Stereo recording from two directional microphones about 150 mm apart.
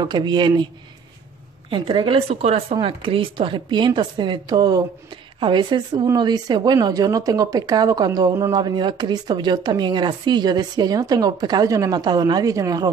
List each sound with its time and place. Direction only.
0.0 s speech: 30° right (ahead or behind)
1.7 s speech: 35° right (ahead or behind)